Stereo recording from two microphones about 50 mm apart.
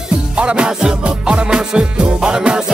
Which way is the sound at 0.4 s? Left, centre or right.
Centre.